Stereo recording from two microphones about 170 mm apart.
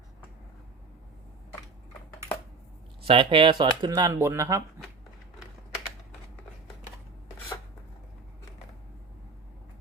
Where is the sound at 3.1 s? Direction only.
30° right (ahead or behind).